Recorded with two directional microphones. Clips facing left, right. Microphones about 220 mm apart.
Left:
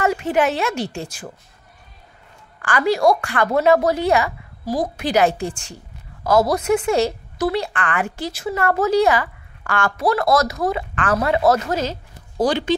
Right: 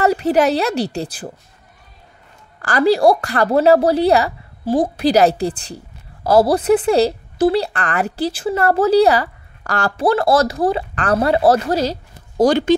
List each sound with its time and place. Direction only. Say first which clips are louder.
0.0 s a woman's voice: right 4 dB; 35° right (ahead or behind)
2.6 s a woman's voice: right 4 dB; 35° right (ahead or behind)